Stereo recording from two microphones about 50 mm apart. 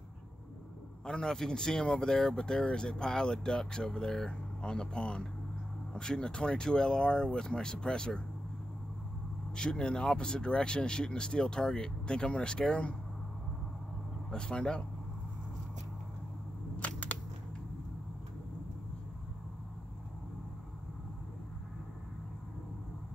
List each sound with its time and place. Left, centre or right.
1.0 s speech: centre
9.6 s speech: centre
14.3 s speech: centre
16.8 s a sound: left